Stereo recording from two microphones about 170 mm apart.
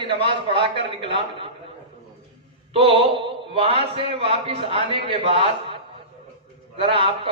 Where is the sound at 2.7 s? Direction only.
35° right (ahead or behind).